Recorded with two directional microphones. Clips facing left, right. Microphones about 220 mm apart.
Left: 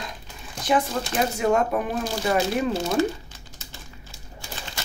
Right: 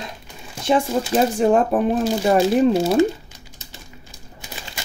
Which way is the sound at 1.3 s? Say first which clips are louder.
Right 2 dB; 30° right (ahead or behind).